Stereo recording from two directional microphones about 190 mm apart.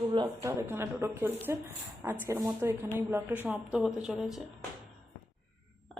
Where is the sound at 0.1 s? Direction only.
25° right (ahead or behind).